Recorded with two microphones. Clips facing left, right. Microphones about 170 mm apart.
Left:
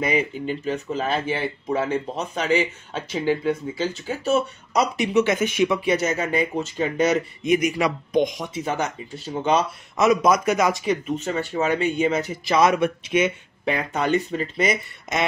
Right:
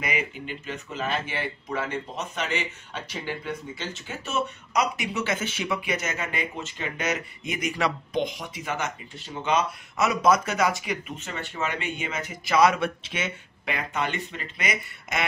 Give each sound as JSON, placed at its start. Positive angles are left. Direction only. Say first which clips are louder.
{"t": 0.0, "sound": "speech", "louder": "left 8 dB", "side_deg": 35}
{"t": 3.8, "sound": "speech", "louder": "left 10 dB", "side_deg": 35}
{"t": 5.0, "sound": "speech", "louder": "left 9 dB", "side_deg": 20}
{"t": 5.8, "sound": "speech", "louder": "left 8 dB", "side_deg": 30}
{"t": 7.4, "sound": "speech", "louder": "left 7 dB", "side_deg": 20}
{"t": 8.5, "sound": "speech", "louder": "left 6 dB", "side_deg": 35}
{"t": 10.0, "sound": "speech", "louder": "left 4 dB", "side_deg": 15}
{"t": 10.8, "sound": "speech", "louder": "left 9 dB", "side_deg": 35}
{"t": 13.7, "sound": "speech", "louder": "left 7 dB", "side_deg": 40}